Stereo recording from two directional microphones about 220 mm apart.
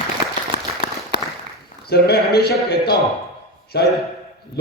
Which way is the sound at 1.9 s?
45° left (ahead or behind).